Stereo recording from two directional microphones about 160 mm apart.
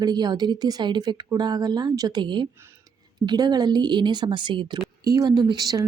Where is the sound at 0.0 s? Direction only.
25° right (ahead or behind).